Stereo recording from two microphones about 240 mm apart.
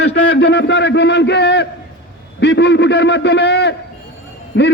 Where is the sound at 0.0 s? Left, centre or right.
Left.